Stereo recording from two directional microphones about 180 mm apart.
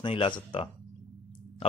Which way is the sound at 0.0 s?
30° left (ahead or behind).